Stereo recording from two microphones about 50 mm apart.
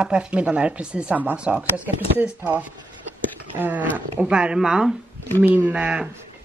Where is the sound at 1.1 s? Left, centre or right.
Right.